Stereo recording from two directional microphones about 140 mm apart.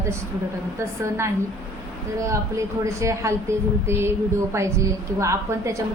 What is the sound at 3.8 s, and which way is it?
Music, 20° right (ahead or behind).